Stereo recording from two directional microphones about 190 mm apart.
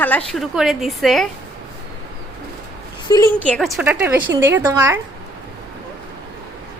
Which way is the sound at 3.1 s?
20° left (ahead or behind).